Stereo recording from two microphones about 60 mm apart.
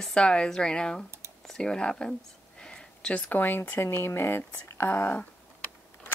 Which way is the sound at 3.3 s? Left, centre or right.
Left.